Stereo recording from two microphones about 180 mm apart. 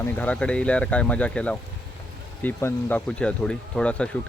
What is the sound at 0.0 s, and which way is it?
A man's voice, 10° left (ahead or behind).